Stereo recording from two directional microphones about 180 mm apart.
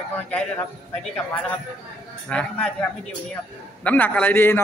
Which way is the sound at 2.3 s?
5° left (ahead or behind).